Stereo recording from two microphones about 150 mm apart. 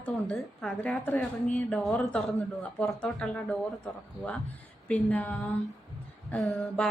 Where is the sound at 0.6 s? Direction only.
10° left (ahead or behind).